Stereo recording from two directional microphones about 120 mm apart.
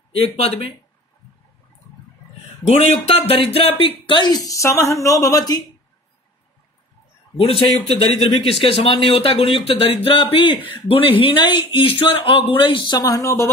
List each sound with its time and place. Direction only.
0.1 s speech: 55° left (ahead or behind)
3.2 s speech: 55° left (ahead or behind); by 5.6 s 30° left (ahead or behind)
7.3 s speech: 50° left (ahead or behind); by 13.5 s 25° left (ahead or behind)